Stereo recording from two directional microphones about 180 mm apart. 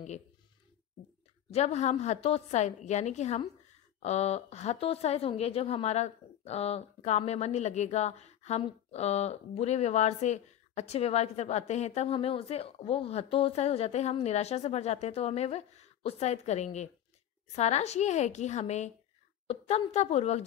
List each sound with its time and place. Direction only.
1.5 s speech: 35° left (ahead or behind)